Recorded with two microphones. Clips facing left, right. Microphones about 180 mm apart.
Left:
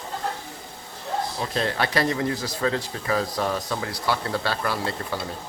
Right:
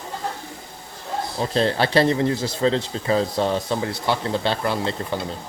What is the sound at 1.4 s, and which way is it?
Speech, 30° right (ahead or behind).